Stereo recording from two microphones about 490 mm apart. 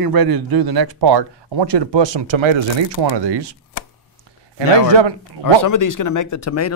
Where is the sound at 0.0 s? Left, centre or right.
Right.